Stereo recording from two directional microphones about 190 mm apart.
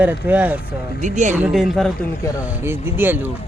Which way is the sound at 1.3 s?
5° right (ahead or behind).